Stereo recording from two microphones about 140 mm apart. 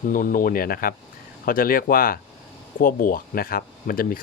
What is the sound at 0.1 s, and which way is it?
Speech, 75° left (ahead or behind).